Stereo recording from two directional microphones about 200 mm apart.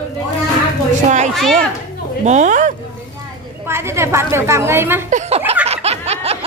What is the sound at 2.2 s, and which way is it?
Speech, 35° right (ahead or behind).